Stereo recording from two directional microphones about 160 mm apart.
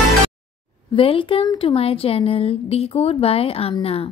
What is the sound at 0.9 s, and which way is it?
A woman's voice, 30° left (ahead or behind).